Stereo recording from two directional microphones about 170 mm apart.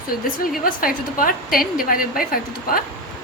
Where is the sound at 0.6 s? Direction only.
55° left (ahead or behind).